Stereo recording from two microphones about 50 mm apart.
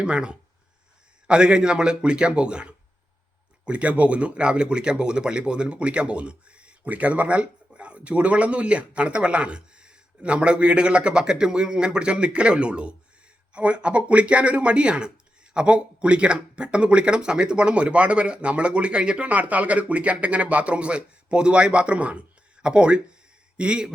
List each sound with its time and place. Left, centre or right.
0.0 s speech: right